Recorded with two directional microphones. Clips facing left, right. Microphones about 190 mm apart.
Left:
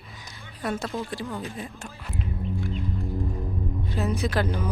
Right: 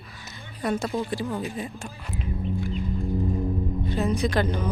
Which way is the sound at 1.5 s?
Centre (ahead or behind).